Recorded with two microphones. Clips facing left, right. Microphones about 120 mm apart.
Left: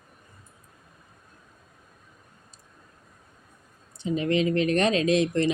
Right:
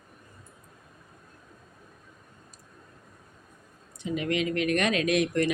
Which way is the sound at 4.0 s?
30° left (ahead or behind).